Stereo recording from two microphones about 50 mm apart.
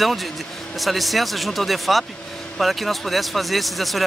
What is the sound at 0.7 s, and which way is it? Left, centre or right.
Speech, centre.